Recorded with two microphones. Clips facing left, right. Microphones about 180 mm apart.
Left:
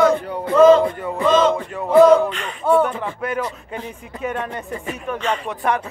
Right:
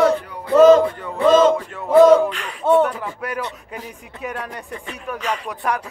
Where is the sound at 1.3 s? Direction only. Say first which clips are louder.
Right 3 dB; 45° right (ahead or behind).